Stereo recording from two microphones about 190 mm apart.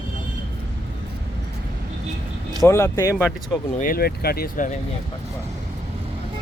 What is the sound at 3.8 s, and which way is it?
Speech, 50° left (ahead or behind).